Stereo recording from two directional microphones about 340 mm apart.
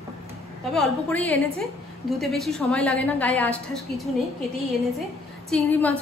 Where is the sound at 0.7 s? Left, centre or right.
Centre.